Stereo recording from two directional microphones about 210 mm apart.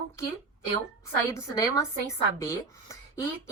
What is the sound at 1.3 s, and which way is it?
Speech, 15° left (ahead or behind).